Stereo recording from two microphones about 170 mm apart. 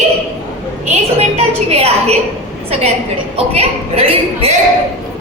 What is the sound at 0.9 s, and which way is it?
A woman's voice, 35° right (ahead or behind).